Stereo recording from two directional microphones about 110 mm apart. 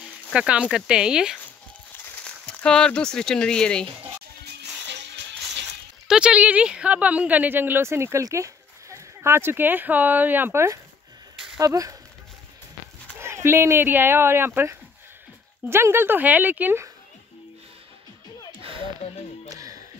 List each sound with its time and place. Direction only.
0.3 s a woman's voice: 10° right (ahead or behind)
2.2 s speech: 5° left (ahead or behind)
6.0 s a woman's voice: 10° right (ahead or behind); by 12.0 s 30° right (ahead or behind)
13.2 s a woman's voice: 25° right (ahead or behind)
19.5 s a sound: 30° right (ahead or behind)